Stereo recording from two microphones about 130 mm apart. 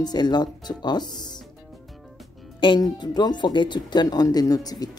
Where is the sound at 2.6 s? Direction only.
35° left (ahead or behind).